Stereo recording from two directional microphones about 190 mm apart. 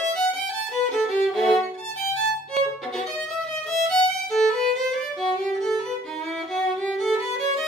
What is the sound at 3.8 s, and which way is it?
Violin, 5° left (ahead or behind).